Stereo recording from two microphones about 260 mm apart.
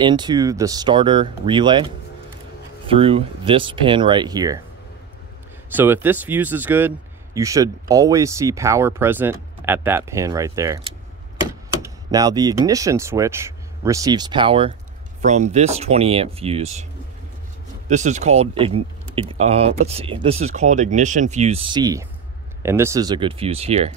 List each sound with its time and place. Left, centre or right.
0.0 s speech: centre
2.9 s speech: right
5.7 s speech: centre
11.8 s speech: centre
17.8 s speech: right